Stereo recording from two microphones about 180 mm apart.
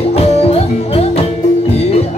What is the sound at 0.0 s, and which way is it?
Music, 35° left (ahead or behind).